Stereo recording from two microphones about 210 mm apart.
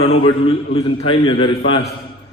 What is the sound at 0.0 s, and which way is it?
A man's voice, 25° left (ahead or behind).